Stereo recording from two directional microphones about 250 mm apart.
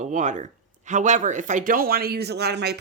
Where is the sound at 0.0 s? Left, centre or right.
Right.